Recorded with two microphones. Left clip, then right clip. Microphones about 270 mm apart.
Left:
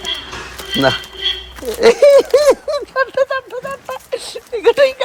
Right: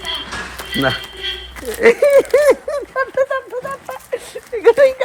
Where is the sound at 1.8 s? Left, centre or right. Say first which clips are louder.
Left 2 dB; centre.